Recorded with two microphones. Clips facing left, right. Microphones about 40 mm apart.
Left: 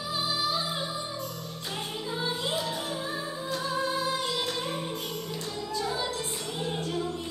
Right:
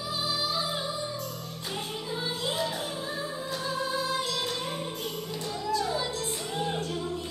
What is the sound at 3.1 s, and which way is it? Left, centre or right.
Music, centre.